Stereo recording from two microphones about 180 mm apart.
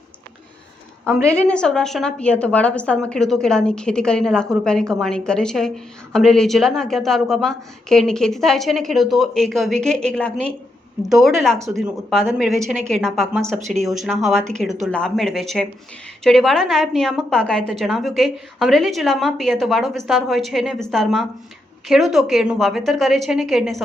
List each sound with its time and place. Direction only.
1.2 s a woman's voice: 5° left (ahead or behind)
13.6 s speech: 40° right (ahead or behind)
14.0 s a woman's voice: centre (ahead or behind)